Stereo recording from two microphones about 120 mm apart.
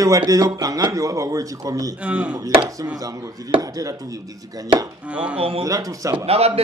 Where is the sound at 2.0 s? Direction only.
10° right (ahead or behind).